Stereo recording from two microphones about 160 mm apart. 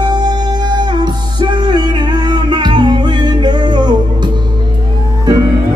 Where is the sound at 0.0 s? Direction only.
25° right (ahead or behind).